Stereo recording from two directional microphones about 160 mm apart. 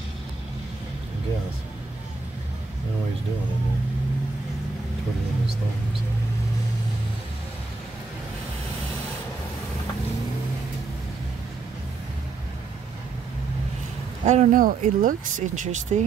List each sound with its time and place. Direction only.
14.2 s speech: 50° right (ahead or behind)